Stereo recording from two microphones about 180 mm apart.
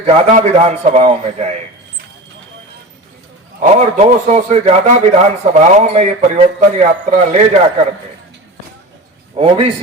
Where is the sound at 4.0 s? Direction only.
35° right (ahead or behind).